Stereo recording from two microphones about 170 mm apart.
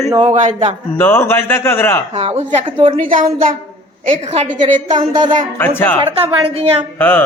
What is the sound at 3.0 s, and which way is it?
Speech, 55° right (ahead or behind).